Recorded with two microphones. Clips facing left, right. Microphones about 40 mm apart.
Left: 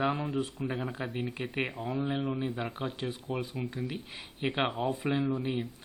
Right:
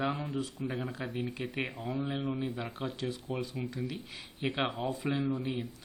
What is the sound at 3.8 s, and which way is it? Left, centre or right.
Speech, left.